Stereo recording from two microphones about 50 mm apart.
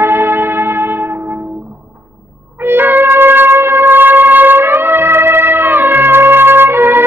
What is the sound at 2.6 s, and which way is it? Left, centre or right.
Shofar, right.